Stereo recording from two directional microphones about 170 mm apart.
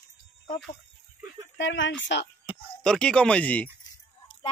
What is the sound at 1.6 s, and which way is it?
Speech, 90° left.